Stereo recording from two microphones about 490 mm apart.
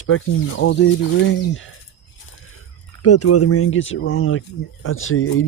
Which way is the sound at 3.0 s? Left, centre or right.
Left.